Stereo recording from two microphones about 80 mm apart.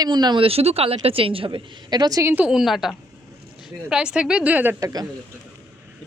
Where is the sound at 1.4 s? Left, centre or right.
Right.